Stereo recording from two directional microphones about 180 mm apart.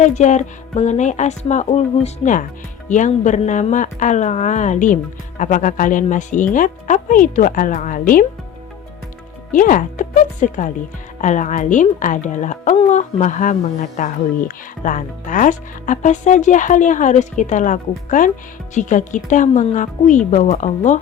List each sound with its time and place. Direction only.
0.0 s a woman's voice: 40° left (ahead or behind)
9.5 s a woman's voice: 50° left (ahead or behind)